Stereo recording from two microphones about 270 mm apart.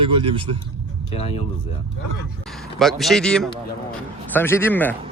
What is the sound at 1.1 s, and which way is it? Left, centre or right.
Speech, left.